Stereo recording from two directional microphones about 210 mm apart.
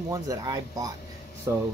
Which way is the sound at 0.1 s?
15° right (ahead or behind).